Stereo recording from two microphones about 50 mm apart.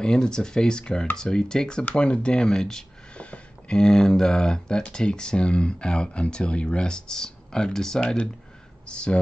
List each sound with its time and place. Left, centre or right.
0.0 s speech: centre
3.2 s speech: left